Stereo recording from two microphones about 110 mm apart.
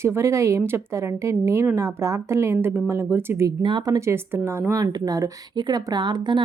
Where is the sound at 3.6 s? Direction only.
40° right (ahead or behind); by 4.8 s 20° right (ahead or behind).